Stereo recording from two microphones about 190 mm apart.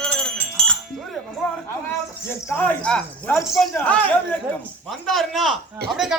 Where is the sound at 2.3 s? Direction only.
10° left (ahead or behind).